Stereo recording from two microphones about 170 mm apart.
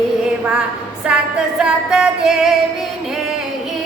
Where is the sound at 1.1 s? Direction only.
5° right (ahead or behind).